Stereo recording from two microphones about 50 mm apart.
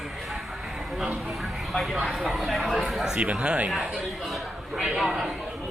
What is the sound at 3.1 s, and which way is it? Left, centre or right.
Speech, right.